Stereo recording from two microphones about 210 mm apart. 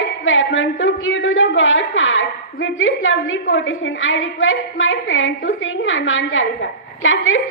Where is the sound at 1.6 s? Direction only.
70° left (ahead or behind).